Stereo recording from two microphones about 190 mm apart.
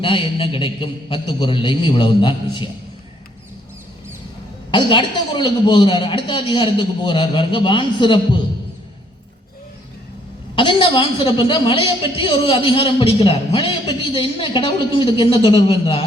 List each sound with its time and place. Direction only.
0.0 s a woman's voice: 30° left (ahead or behind)
4.7 s a woman's voice: 25° left (ahead or behind)
10.5 s a woman's voice: 25° left (ahead or behind)